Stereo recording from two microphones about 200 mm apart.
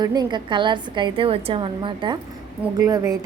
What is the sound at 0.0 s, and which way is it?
A woman's voice, 20° right (ahead or behind).